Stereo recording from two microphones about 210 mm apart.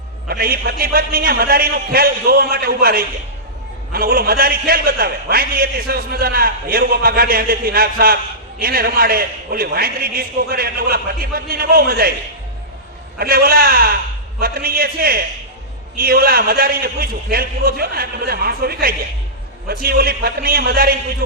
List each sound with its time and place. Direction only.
0.3 s a man's voice: 45° right (ahead or behind)
13.1 s a man's voice: 45° right (ahead or behind)